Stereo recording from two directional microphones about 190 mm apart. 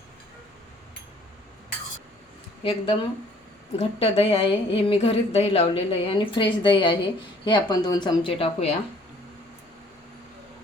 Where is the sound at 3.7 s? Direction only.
30° left (ahead or behind).